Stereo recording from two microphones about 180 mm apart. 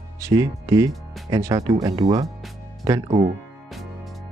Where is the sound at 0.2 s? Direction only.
20° right (ahead or behind).